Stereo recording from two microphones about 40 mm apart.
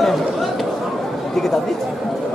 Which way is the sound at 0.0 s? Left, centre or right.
Centre.